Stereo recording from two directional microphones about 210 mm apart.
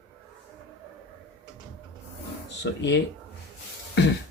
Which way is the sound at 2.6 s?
60° left (ahead or behind).